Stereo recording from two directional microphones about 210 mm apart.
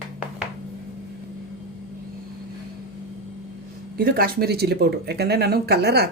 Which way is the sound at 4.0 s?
45° right (ahead or behind).